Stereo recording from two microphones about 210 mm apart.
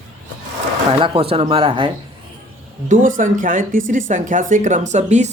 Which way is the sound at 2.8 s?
40° right (ahead or behind).